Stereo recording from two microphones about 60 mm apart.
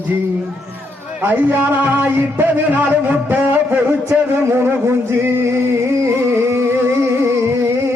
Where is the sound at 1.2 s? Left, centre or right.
Right.